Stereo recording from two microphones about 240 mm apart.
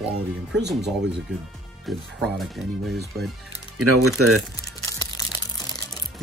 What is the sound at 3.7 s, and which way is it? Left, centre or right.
Speech, right.